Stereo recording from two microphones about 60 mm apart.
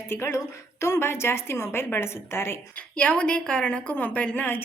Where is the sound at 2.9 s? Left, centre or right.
Left.